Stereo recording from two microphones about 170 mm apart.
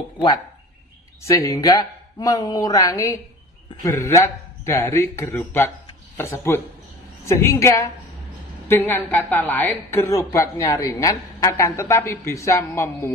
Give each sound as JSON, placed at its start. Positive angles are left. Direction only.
{"t": 1.2, "sound": "speech", "side_deg": 20}